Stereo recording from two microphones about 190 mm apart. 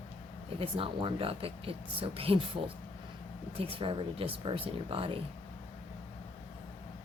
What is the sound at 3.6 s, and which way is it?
Speech, 30° right (ahead or behind).